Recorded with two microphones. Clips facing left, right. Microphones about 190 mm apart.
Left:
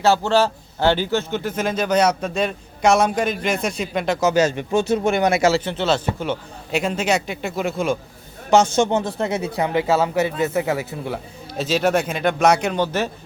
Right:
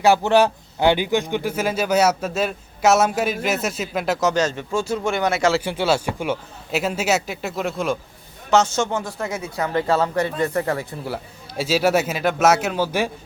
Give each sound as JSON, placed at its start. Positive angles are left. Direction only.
{"t": 0.0, "sound": "speech", "side_deg": -15}
{"t": 5.6, "sound": "speech", "side_deg": -10}
{"t": 8.4, "sound": "speech", "side_deg": 15}
{"t": 9.8, "sound": "speech", "side_deg": 5}